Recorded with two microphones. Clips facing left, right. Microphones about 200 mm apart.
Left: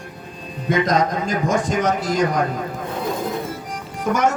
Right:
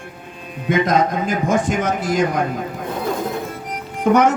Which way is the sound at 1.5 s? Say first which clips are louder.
Even; 55° right (ahead or behind).